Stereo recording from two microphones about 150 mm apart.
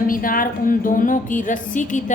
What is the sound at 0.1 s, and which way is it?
A woman's voice, 65° left (ahead or behind).